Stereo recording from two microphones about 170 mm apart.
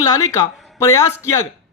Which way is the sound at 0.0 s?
20° left (ahead or behind).